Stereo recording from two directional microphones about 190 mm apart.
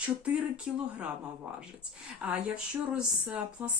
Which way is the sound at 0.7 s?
5° right (ahead or behind).